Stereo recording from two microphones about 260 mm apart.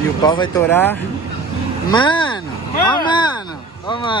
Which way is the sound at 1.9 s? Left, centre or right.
Centre.